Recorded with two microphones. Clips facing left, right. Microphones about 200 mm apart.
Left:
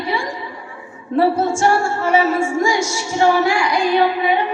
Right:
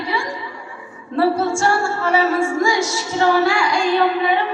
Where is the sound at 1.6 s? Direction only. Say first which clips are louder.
Left 2 dB; 15° left (ahead or behind).